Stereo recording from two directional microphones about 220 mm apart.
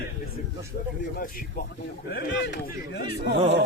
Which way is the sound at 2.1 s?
50° left (ahead or behind).